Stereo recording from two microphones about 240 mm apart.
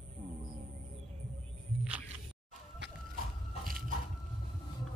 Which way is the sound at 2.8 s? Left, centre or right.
Right.